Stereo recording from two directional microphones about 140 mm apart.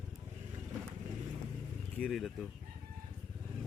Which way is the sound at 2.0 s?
5° left (ahead or behind).